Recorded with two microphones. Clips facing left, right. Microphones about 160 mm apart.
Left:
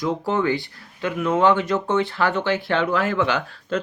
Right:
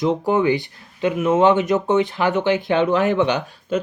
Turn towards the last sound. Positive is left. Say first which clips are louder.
# right 2 dB
turn(degrees=-20)  # may be behind; listen again after turning